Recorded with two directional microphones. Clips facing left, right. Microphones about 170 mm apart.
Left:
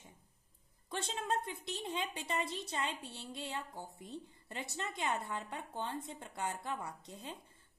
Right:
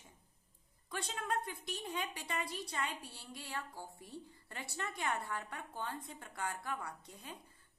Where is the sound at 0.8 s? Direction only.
25° left (ahead or behind).